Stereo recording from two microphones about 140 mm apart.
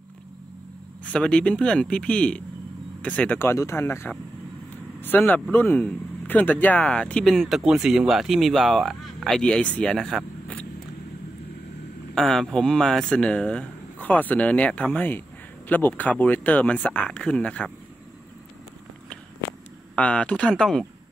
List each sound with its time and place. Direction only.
1.1 s speech: 10° left (ahead or behind)
12.2 s speech: 5° left (ahead or behind)
20.0 s speech: 10° left (ahead or behind)